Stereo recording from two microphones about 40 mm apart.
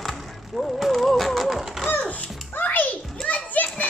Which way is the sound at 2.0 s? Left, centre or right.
Left.